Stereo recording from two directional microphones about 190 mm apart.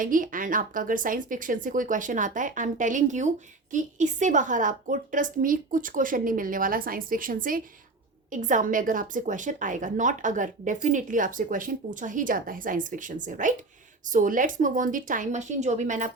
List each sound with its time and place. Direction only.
0.0 s a woman's voice: 45° right (ahead or behind)